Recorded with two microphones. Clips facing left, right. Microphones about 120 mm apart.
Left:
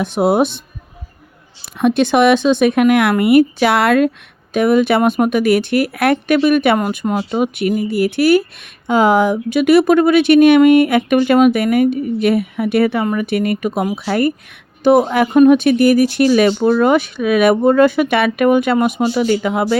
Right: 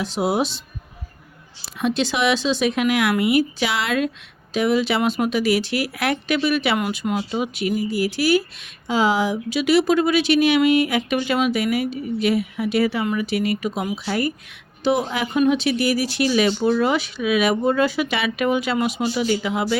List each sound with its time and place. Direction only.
0.0 s speech: 55° left (ahead or behind)
1.6 s speech: 55° left (ahead or behind)